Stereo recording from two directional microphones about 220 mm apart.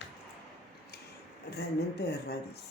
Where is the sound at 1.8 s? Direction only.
45° left (ahead or behind).